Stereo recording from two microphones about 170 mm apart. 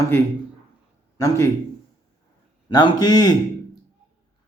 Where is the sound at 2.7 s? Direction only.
25° left (ahead or behind).